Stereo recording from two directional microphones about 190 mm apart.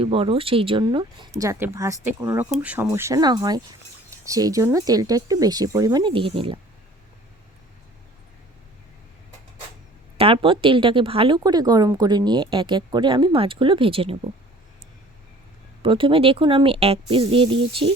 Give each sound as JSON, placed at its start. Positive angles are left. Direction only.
{"t": 0.0, "sound": "speech", "side_deg": -30}
{"t": 10.2, "sound": "speech", "side_deg": -30}
{"t": 15.8, "sound": "speech", "side_deg": -25}